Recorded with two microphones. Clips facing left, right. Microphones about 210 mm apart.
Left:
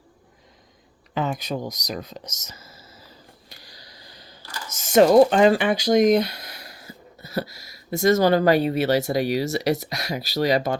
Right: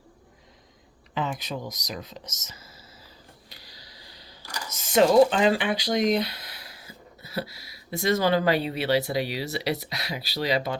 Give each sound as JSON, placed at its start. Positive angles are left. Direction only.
{"t": 1.1, "sound": "speech", "side_deg": 45}
{"t": 3.5, "sound": "a sound", "side_deg": 45}
{"t": 4.7, "sound": "speech", "side_deg": 45}